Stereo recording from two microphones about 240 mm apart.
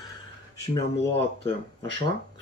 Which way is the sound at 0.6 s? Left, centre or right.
Left.